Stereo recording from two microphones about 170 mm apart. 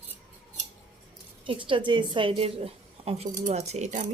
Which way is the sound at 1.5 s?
30° right (ahead or behind).